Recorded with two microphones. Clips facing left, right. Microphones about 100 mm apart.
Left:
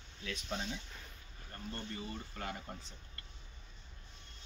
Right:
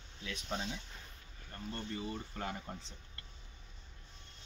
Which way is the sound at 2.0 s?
20° right (ahead or behind).